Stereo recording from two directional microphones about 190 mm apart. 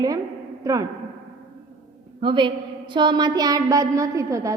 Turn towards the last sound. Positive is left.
turn(degrees=-15)  # may be behind; listen again after turning